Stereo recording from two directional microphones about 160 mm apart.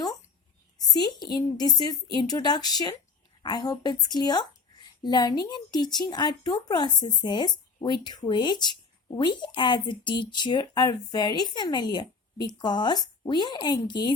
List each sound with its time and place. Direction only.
0.8 s speech: 25° left (ahead or behind)